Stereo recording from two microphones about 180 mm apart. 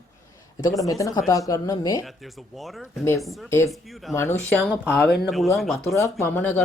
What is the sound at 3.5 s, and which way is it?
Speech, 15° left (ahead or behind).